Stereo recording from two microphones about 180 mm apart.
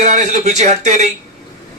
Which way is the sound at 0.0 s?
40° right (ahead or behind).